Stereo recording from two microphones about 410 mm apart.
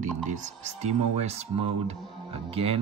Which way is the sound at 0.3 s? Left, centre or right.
Centre.